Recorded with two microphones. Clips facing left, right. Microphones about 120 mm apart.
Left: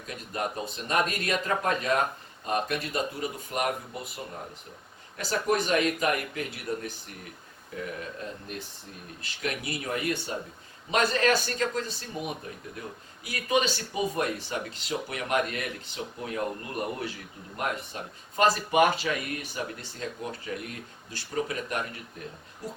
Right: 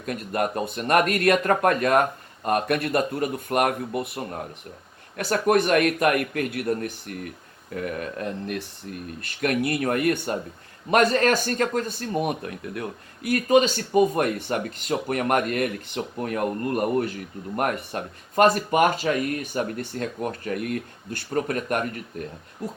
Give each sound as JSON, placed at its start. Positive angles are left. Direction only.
{"t": 0.0, "sound": "speech", "side_deg": -55}
{"t": 9.2, "sound": "a man's voice", "side_deg": -55}